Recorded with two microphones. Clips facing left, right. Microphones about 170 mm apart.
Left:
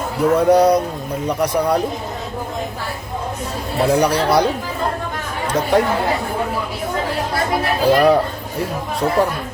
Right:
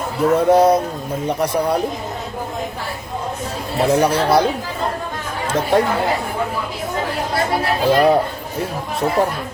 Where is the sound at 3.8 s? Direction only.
25° right (ahead or behind).